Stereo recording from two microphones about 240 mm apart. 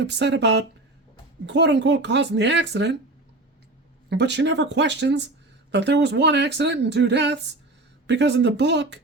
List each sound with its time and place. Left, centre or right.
0.0 s speech: right
4.1 s speech: right